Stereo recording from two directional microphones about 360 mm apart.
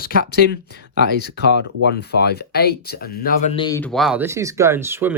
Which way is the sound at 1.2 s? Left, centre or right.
Left.